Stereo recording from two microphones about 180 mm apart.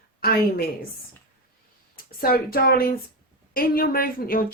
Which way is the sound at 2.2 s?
55° left (ahead or behind).